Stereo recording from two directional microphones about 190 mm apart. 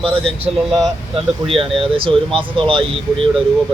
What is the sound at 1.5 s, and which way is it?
Speech, 30° right (ahead or behind).